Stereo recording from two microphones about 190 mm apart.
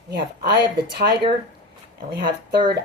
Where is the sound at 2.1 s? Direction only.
50° right (ahead or behind).